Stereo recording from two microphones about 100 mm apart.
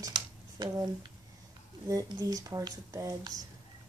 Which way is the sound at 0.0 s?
40° right (ahead or behind).